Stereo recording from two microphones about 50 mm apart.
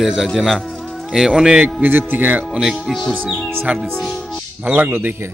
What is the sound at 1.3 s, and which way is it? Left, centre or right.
Speech, centre.